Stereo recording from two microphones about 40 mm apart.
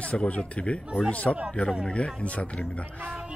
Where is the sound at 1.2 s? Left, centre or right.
Centre.